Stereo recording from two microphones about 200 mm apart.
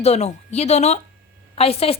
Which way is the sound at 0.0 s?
35° left (ahead or behind).